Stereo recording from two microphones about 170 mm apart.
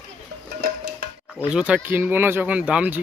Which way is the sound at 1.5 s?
5° right (ahead or behind).